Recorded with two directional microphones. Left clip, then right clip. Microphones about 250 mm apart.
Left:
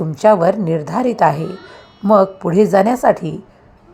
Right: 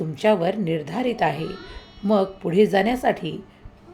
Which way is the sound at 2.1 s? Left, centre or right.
Left.